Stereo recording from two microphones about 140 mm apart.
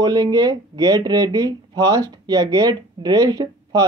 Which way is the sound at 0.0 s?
30° right (ahead or behind).